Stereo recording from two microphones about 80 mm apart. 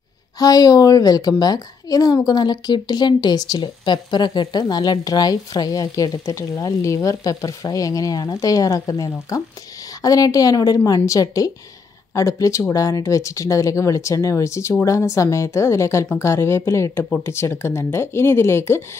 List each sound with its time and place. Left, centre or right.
0.4 s speech: left
2.2 s speech: left